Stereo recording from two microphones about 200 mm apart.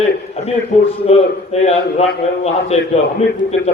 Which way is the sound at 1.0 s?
30° left (ahead or behind).